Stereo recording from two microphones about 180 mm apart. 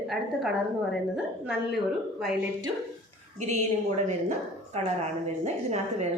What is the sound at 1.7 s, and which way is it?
Speech, centre (ahead or behind).